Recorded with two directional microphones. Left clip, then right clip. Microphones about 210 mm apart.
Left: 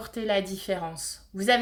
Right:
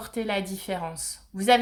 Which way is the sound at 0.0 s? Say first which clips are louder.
Left 2 dB; 15° right (ahead or behind).